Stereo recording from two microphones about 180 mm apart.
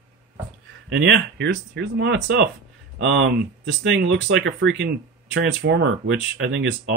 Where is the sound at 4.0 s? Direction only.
75° right (ahead or behind).